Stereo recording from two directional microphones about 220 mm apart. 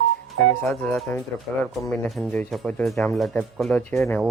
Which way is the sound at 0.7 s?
Centre (ahead or behind).